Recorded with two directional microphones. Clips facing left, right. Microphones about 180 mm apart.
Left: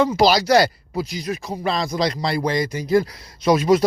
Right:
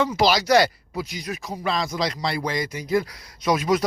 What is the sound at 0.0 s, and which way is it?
Speech, 35° left (ahead or behind).